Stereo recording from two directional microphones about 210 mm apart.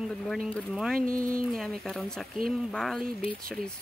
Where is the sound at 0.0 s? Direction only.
Centre (ahead or behind).